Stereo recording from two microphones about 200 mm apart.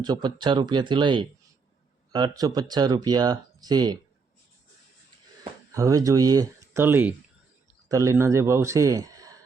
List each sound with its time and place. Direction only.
0.0 s speech: 20° right (ahead or behind)
5.4 s a man's voice: 15° right (ahead or behind)